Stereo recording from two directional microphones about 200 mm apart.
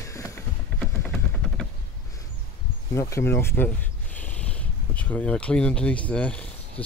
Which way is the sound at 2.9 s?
15° left (ahead or behind).